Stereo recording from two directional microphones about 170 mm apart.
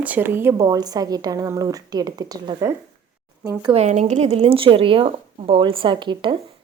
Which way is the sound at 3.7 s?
40° right (ahead or behind).